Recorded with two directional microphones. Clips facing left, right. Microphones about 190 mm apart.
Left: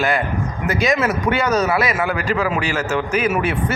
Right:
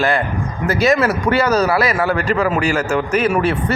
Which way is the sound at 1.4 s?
Centre (ahead or behind).